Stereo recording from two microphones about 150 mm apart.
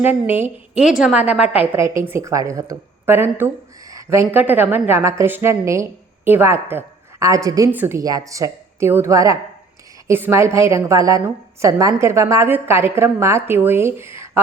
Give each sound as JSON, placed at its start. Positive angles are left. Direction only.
{"t": 0.0, "sound": "a woman's voice", "side_deg": -15}